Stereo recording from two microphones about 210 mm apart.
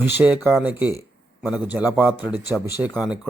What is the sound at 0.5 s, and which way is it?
A man's voice, 5° right (ahead or behind).